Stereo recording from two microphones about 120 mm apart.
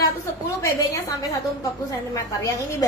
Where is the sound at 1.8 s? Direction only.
25° left (ahead or behind).